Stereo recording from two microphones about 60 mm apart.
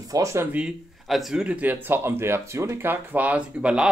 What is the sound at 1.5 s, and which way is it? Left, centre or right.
Speech, right.